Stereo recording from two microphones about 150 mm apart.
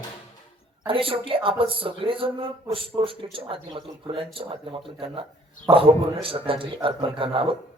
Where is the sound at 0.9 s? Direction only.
35° right (ahead or behind).